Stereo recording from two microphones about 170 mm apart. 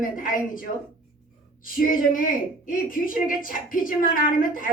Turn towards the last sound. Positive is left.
turn(degrees=55)  # may be behind; listen again after turning